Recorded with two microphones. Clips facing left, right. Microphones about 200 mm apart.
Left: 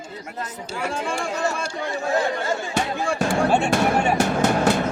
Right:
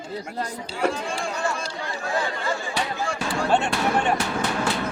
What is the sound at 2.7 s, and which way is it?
Music, 45° left (ahead or behind).